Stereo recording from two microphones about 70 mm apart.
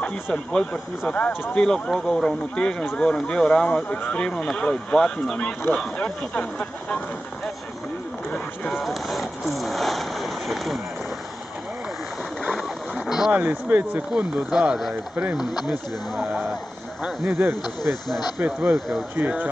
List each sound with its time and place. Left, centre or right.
0.0 s speech: centre
8.3 s vehicle: centre
13.3 s speech: right
14.1 s speech: centre
17.0 s speech: centre
17.4 s speech: right
18.4 s speech: right